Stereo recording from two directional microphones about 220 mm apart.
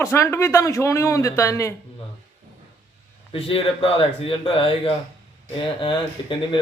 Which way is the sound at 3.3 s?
25° left (ahead or behind).